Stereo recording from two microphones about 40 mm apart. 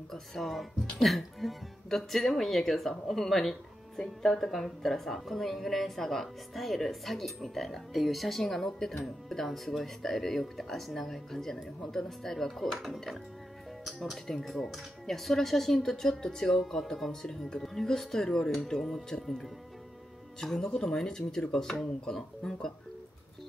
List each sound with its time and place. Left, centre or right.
0.1 s speech: centre
14.2 s speech: centre
20.6 s speech: left
21.0 s speech: centre